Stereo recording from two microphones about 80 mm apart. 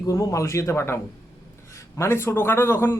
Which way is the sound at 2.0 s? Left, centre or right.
Left.